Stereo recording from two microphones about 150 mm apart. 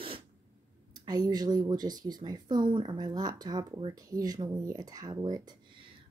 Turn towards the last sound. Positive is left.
turn(degrees=-25)  # may be behind; listen again after turning